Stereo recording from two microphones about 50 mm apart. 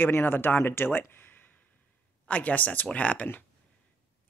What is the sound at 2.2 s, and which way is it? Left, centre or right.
Speech, left.